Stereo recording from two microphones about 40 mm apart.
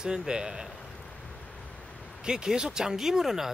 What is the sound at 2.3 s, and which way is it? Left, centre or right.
Speech, centre.